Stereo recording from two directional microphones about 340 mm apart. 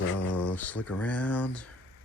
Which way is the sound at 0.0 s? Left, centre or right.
Left.